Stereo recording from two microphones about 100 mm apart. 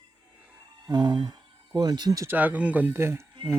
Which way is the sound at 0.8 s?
45° right (ahead or behind).